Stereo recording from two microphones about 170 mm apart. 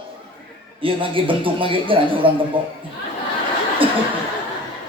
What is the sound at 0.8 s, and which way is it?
A man's voice, 30° right (ahead or behind).